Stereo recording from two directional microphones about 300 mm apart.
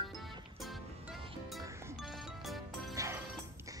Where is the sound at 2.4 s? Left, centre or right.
Centre.